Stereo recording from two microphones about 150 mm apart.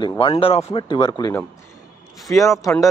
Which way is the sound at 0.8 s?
30° left (ahead or behind).